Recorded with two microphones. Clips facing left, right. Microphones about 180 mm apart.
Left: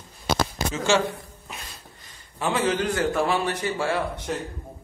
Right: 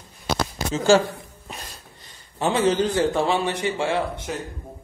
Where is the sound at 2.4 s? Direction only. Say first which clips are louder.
Right 3 dB; 30° right (ahead or behind).